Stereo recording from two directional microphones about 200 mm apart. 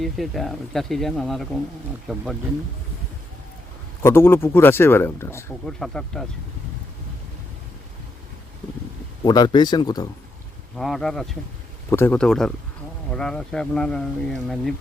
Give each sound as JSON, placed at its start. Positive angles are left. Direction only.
{"t": 0.0, "sound": "speech", "side_deg": 0}
{"t": 4.0, "sound": "speech", "side_deg": 10}
{"t": 9.2, "sound": "speech", "side_deg": 20}
{"t": 10.8, "sound": "speech", "side_deg": 0}